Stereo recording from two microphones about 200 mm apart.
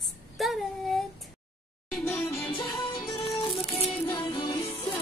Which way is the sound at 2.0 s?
10° left (ahead or behind).